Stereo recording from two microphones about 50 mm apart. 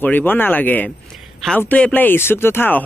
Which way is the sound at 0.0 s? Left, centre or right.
Left.